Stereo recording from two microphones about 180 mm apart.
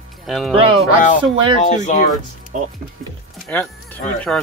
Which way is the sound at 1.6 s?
45° left (ahead or behind).